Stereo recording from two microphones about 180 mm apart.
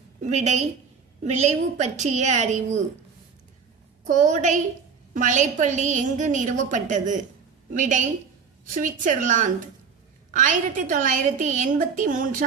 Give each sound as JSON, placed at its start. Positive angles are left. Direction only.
{"t": 0.2, "sound": "a woman's voice", "side_deg": -40}
{"t": 4.0, "sound": "a woman's voice", "side_deg": -45}